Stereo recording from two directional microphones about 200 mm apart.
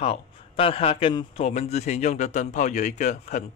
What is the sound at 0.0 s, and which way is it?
A man's voice, 30° left (ahead or behind).